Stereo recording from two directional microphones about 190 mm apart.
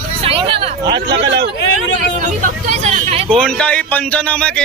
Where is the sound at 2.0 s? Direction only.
40° right (ahead or behind).